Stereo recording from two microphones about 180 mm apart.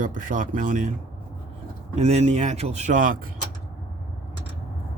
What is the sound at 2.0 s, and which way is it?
Speech, 35° right (ahead or behind).